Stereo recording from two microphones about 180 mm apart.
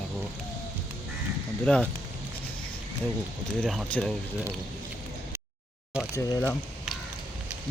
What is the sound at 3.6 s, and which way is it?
Speech, centre (ahead or behind).